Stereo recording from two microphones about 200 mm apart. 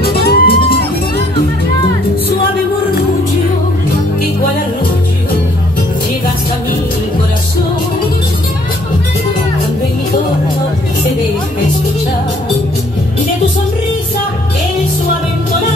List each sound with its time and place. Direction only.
0.0 s music: 50° left (ahead or behind)